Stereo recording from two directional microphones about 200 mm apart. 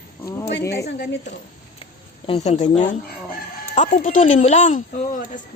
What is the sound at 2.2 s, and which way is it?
Speech, 30° left (ahead or behind).